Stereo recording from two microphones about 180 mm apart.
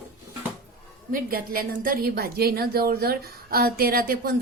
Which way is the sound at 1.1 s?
55° right (ahead or behind).